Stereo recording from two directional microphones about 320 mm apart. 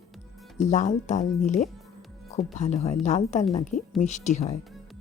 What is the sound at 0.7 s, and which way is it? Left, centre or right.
Speech, left.